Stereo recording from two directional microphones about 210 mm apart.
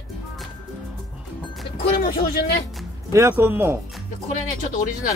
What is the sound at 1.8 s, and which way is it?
Speech, 50° left (ahead or behind).